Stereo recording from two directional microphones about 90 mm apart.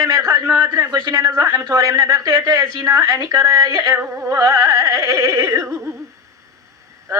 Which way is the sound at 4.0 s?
20° right (ahead or behind).